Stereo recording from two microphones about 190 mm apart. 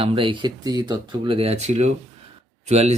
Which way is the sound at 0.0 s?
30° right (ahead or behind).